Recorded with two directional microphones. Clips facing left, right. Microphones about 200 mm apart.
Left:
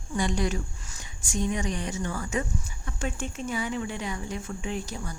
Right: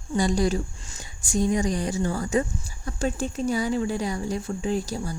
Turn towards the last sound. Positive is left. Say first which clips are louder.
# right 6 dB
turn(degrees=-35)  # may be behind; listen again after turning